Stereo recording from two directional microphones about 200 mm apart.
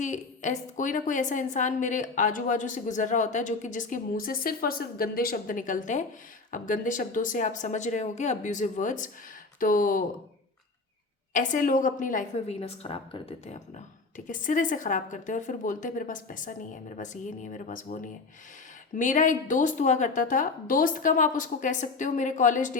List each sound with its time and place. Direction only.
0.0 s a woman's voice: 35° left (ahead or behind)
11.3 s a woman's voice: 40° left (ahead or behind)